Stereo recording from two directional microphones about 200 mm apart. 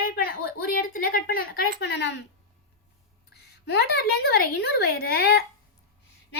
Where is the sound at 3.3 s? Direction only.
55° left (ahead or behind).